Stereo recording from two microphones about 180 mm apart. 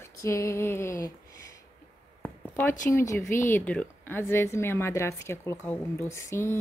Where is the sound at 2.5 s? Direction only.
15° left (ahead or behind).